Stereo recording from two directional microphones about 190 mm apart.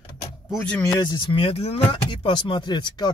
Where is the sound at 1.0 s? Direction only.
25° left (ahead or behind).